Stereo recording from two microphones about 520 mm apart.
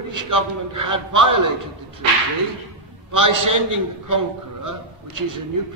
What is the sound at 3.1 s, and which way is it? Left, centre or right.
A man's voice, right.